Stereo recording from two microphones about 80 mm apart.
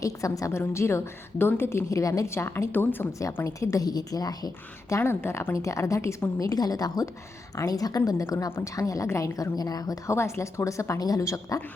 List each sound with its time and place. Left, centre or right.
0.0 s a woman's voice: left
3.1 s a woman's voice: left
5.5 s a woman's voice: left
8.4 s a woman's voice: left
8.7 s a woman's voice: left
10.1 s a woman's voice: left